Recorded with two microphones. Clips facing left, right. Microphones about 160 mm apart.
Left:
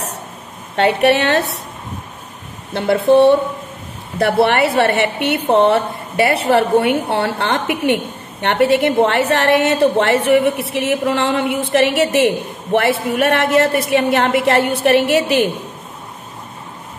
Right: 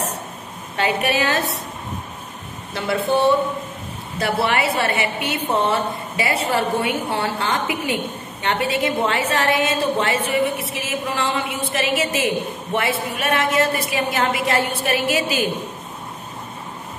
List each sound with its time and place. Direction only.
0.7 s a woman's voice: 65° left (ahead or behind)
2.7 s a woman's voice: 55° left (ahead or behind)
4.2 s a woman's voice: 65° left (ahead or behind)